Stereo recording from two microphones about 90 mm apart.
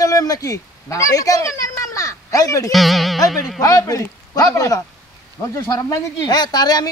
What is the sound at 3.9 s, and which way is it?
Speech, 40° left (ahead or behind).